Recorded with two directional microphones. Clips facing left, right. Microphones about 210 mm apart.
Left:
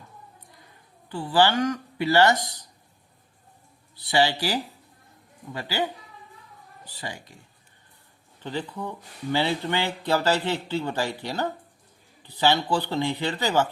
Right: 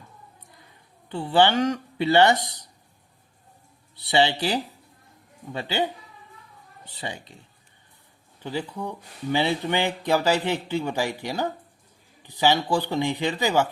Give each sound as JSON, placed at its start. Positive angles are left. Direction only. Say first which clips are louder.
{"t": 1.1, "sound": "speech", "louder": "right 2 dB", "side_deg": -25}
{"t": 3.9, "sound": "speech", "louder": "right 1 dB", "side_deg": -25}
{"t": 6.8, "sound": "speech", "louder": "right 2 dB", "side_deg": -25}
{"t": 8.4, "sound": "speech", "louder": "right 1 dB", "side_deg": -10}